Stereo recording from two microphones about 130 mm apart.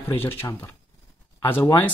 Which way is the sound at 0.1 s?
15° left (ahead or behind).